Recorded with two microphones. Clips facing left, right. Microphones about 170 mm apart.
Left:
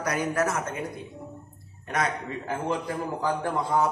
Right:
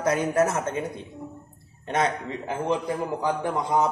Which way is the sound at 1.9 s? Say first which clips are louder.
Right 3 dB; 25° right (ahead or behind).